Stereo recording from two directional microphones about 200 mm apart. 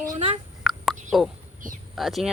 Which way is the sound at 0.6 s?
Centre (ahead or behind).